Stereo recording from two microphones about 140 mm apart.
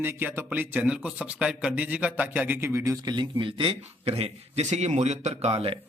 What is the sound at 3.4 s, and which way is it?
A man's voice, 40° right (ahead or behind).